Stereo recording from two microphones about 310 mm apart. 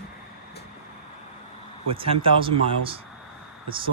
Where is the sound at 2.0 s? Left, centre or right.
Centre.